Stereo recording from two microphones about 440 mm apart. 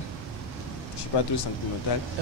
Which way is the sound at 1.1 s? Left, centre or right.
Left.